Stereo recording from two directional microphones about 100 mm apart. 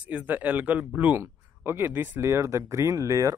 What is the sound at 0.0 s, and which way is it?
Speech, 15° right (ahead or behind).